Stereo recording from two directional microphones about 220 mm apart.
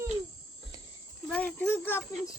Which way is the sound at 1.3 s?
5° left (ahead or behind).